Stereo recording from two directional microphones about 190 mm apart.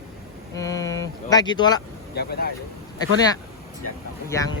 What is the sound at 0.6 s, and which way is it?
Speech, 20° left (ahead or behind).